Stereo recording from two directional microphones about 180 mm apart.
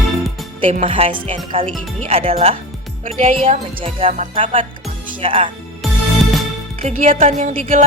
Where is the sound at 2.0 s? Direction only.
35° right (ahead or behind).